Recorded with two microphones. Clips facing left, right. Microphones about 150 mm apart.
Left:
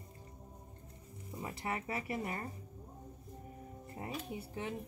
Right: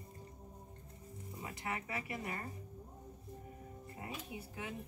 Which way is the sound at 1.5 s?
30° left (ahead or behind).